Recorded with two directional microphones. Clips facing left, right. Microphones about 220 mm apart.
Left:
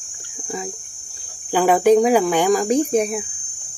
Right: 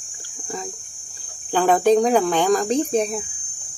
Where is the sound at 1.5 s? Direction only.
10° left (ahead or behind).